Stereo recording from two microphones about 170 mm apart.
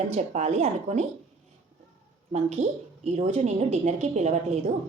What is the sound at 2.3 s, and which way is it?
A woman's voice, 40° right (ahead or behind).